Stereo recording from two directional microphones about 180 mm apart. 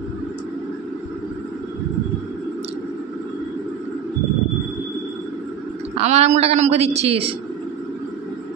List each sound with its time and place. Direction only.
5.9 s a woman's voice: 35° right (ahead or behind)